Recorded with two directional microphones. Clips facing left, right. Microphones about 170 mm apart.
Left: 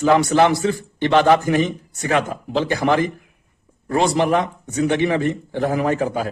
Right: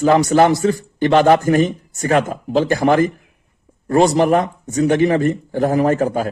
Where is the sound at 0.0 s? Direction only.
45° right (ahead or behind).